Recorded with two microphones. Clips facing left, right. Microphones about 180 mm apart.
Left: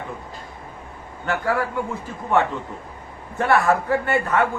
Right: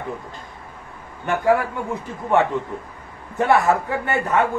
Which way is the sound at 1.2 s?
20° right (ahead or behind).